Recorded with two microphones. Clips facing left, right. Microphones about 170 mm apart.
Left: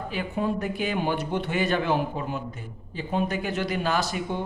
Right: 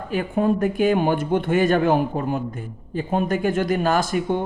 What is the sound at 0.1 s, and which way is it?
Speech, 50° right (ahead or behind).